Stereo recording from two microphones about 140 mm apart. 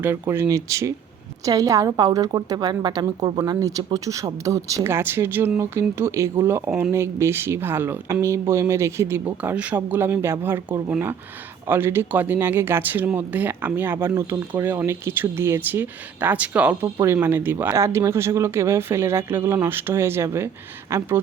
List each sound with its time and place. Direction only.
0.0 s a woman's voice: 15° right (ahead or behind)